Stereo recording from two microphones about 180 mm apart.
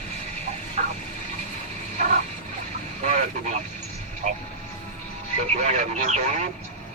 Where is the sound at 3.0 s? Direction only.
40° right (ahead or behind).